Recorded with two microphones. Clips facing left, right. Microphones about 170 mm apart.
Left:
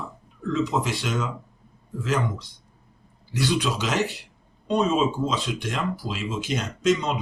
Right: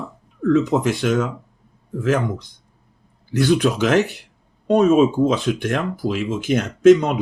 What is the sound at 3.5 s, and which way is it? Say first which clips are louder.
Speech: right 9 dB; 55° right (ahead or behind).